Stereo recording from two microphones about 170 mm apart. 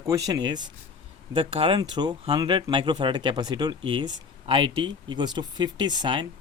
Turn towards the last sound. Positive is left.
turn(degrees=-25)  # may be behind; listen again after turning